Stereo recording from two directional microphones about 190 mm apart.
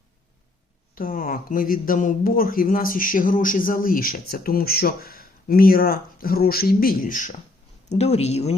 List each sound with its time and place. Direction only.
0.9 s speech: 50° left (ahead or behind)